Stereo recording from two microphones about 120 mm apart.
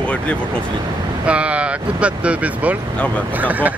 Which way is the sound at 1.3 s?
10° right (ahead or behind).